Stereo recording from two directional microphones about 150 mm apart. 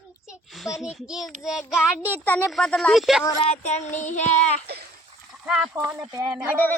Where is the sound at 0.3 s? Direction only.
Centre (ahead or behind).